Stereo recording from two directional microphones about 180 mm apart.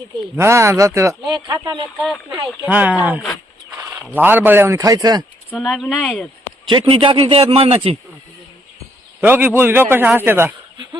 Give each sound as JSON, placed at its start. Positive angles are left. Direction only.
{"t": 0.3, "sound": "speech", "side_deg": -15}
{"t": 2.0, "sound": "speech", "side_deg": 0}
{"t": 2.6, "sound": "speech", "side_deg": -10}
{"t": 5.5, "sound": "speech", "side_deg": 0}
{"t": 6.7, "sound": "a man's voice", "side_deg": -25}
{"t": 9.2, "sound": "speech", "side_deg": -10}